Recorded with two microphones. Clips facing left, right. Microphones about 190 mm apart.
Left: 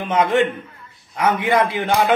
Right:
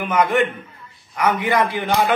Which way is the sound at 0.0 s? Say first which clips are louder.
Left 1 dB; 25° left (ahead or behind).